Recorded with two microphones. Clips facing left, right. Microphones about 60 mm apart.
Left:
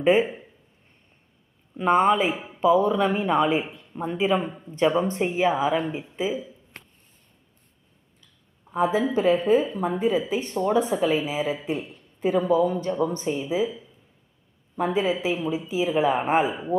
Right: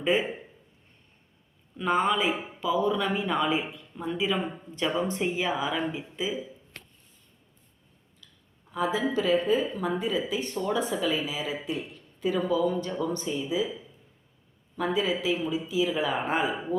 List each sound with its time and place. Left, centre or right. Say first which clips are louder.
0.0 s speech: left 6 dB; left
1.7 s speech: left 6 dB; left
2.3 s speech: even; centre
2.6 s speech: left 8 dB; left
8.7 s speech: left 5 dB; left
14.8 s speech: left 3 dB; left